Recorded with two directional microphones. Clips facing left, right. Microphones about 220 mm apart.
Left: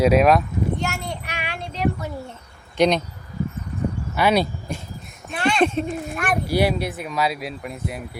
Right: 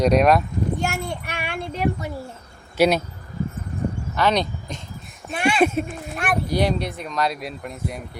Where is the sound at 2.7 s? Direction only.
5° right (ahead or behind).